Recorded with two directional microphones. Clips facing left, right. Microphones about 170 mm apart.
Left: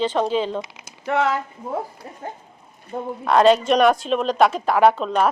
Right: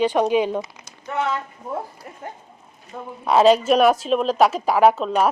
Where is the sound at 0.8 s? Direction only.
85° left.